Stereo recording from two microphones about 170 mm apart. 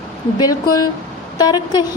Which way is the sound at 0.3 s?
25° left (ahead or behind).